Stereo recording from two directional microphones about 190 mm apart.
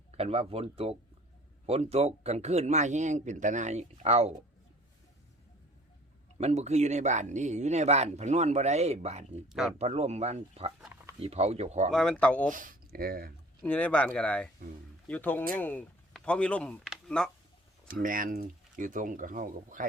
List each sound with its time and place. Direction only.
0.1 s speech: 30° right (ahead or behind)
6.4 s speech: 35° right (ahead or behind)
9.5 s speech: centre (ahead or behind)
9.7 s speech: 35° right (ahead or behind)
11.9 s speech: 5° left (ahead or behind)
12.5 s speech: 45° right (ahead or behind)
13.6 s speech: 5° left (ahead or behind)
17.8 s speech: 45° right (ahead or behind)